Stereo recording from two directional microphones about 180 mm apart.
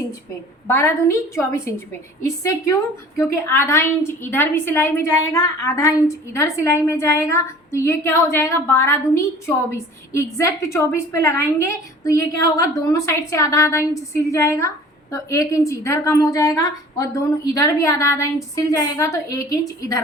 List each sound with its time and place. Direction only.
0.7 s a woman's voice: 15° left (ahead or behind)